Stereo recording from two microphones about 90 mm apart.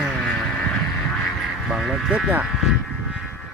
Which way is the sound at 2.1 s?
15° right (ahead or behind).